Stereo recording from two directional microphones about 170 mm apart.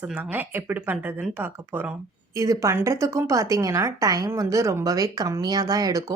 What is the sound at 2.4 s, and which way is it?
A woman's voice, 20° right (ahead or behind).